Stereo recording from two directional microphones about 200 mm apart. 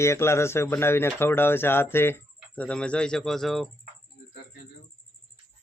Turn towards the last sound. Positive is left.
turn(degrees=0)  # may be behind; listen again after turning